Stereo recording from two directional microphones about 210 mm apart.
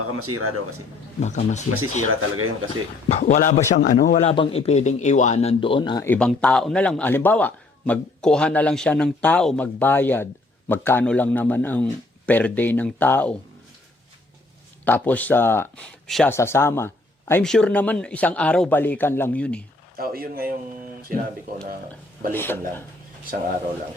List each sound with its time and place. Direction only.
0.2 s speech: 90° right
1.2 s speech: 35° left (ahead or behind)
2.0 s a man's voice: 80° right
3.1 s speech: 35° left (ahead or behind)
6.1 s a man's voice: 5° left (ahead or behind)
14.8 s a man's voice: 10° left (ahead or behind)
20.0 s speech: 45° right (ahead or behind)
22.3 s a man's voice: 10° left (ahead or behind)